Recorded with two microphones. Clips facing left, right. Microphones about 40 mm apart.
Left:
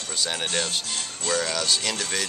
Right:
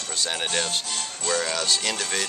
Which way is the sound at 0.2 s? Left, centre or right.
Centre.